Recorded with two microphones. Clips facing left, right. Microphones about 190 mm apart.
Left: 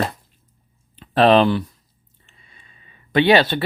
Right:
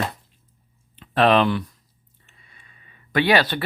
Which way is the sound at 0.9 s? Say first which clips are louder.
Left 4 dB; 30° left (ahead or behind).